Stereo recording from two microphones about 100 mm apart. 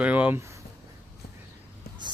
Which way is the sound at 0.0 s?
15° right (ahead or behind).